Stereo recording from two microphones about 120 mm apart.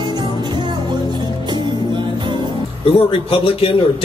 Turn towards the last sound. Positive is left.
turn(degrees=50)  # may be behind; listen again after turning